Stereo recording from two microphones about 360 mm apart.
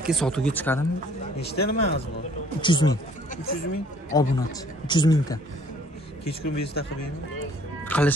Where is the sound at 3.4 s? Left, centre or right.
Left.